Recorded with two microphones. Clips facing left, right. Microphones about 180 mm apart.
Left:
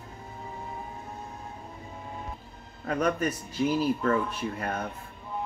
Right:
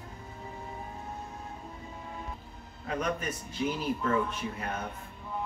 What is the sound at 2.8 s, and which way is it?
Speech, 45° left (ahead or behind).